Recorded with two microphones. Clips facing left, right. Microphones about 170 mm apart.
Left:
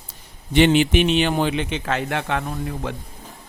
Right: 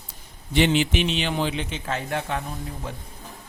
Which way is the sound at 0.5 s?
60° left (ahead or behind).